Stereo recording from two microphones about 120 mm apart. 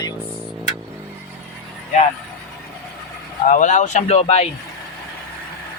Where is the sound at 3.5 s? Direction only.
90° left; by 4.4 s 60° left (ahead or behind).